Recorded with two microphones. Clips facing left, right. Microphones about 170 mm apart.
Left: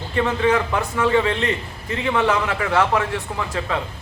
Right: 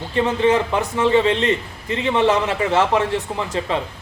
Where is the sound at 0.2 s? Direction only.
20° right (ahead or behind).